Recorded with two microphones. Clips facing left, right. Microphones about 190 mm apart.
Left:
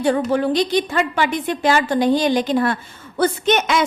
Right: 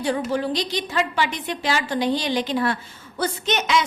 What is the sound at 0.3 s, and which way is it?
A woman's voice, 55° left (ahead or behind).